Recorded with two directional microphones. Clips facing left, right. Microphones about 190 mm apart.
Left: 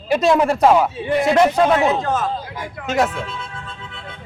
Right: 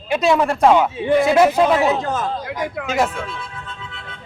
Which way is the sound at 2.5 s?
80° right.